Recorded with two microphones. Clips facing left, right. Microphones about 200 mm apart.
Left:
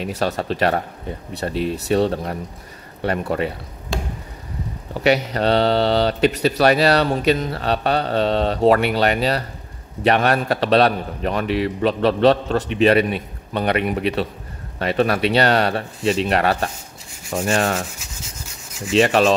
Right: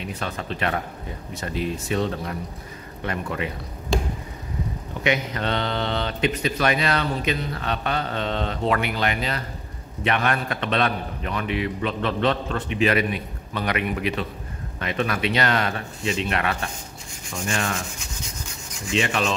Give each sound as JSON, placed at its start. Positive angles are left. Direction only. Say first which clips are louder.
{"t": 0.2, "sound": "speech", "louder": "left 8 dB", "side_deg": 35}
{"t": 5.0, "sound": "speech", "louder": "left 7 dB", "side_deg": 35}
{"t": 18.9, "sound": "speech", "louder": "left 8 dB", "side_deg": 35}